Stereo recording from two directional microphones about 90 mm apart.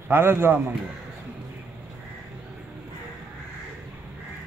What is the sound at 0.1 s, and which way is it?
Speech, 25° right (ahead or behind).